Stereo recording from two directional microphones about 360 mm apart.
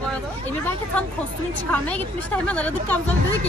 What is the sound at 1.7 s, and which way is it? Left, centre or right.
Speech, centre.